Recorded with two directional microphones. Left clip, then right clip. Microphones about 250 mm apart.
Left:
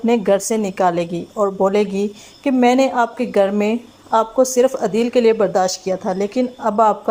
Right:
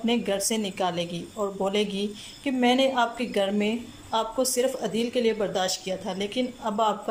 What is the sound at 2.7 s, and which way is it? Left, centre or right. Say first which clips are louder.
A woman's voice: left 7 dB; centre.